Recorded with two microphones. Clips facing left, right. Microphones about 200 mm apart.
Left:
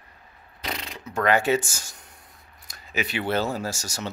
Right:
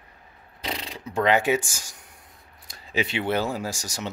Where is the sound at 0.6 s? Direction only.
30° right (ahead or behind).